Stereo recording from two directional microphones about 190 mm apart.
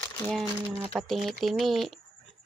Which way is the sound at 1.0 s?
Centre (ahead or behind).